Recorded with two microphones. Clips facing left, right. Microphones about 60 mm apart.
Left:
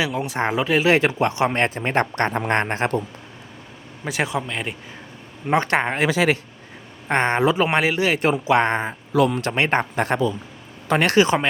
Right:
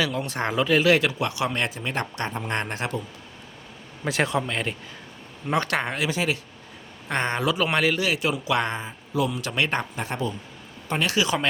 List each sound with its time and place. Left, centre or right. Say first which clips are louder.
0.0 s speech: left 3 dB; centre
0.9 s speech: left 3 dB; left
2.5 s speech: left 7 dB; left
4.0 s speech: even; centre
5.5 s speech: left 5 dB; left
7.1 s speech: left 6 dB; left
8.0 s speech: left 5 dB; left
8.7 s speech: left 7 dB; left
9.5 s speech: left 5 dB; left
9.9 s speech: left 8 dB; left